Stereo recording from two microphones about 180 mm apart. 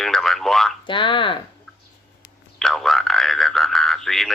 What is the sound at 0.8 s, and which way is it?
Speech, 25° left (ahead or behind).